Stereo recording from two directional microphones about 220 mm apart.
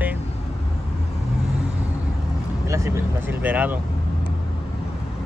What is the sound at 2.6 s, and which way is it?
Speech, 15° right (ahead or behind).